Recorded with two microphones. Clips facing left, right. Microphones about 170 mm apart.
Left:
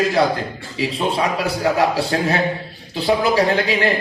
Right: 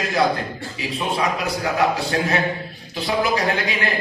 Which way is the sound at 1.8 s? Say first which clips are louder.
Left 2 dB; 30° left (ahead or behind).